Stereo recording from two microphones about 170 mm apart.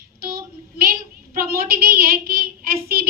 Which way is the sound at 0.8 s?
60° right (ahead or behind).